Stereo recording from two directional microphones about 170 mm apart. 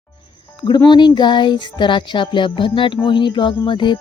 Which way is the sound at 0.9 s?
25° left (ahead or behind).